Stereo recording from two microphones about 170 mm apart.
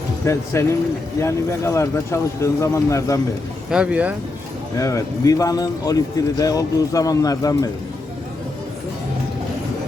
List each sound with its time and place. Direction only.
0.3 s speech: 15° left (ahead or behind)
3.7 s speech: 5° right (ahead or behind)
4.8 s speech: 20° left (ahead or behind)